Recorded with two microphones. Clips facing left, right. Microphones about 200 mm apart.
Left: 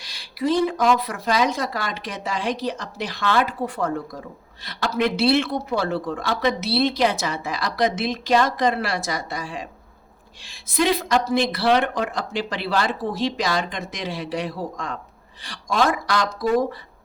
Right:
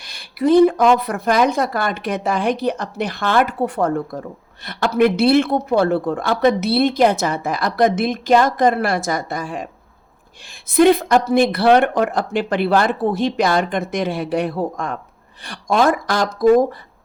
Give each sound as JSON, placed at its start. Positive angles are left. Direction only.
{"t": 0.0, "sound": "speech", "side_deg": -55}
{"t": 10.8, "sound": "speech", "side_deg": -55}